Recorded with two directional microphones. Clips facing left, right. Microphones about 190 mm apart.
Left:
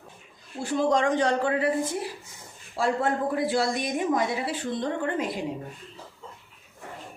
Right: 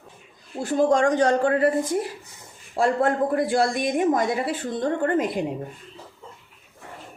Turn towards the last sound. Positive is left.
turn(degrees=-50)  # may be behind; listen again after turning